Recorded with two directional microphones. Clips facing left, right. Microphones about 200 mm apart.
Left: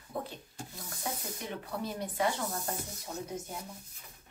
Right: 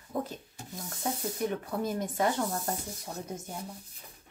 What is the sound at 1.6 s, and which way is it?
Speech, 45° right (ahead or behind).